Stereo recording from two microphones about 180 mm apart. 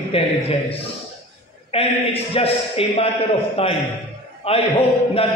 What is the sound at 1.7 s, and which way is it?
A man's voice, 30° left (ahead or behind).